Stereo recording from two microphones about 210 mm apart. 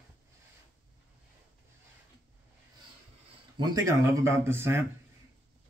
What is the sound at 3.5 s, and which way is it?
Speech, 20° right (ahead or behind).